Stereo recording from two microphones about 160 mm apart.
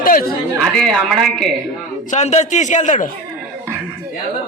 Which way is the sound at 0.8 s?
Centre (ahead or behind).